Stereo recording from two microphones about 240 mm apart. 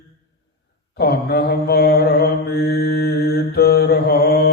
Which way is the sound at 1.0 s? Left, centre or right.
Left.